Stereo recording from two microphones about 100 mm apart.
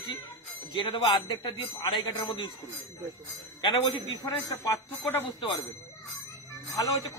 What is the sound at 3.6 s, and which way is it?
Speech, 60° left (ahead or behind).